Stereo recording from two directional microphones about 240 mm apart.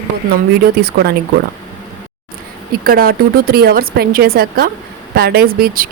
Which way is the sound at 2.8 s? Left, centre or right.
Right.